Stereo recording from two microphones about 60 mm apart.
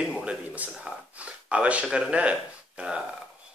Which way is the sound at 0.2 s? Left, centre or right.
Centre.